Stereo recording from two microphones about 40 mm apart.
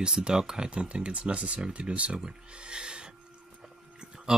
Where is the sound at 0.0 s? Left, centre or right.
Right.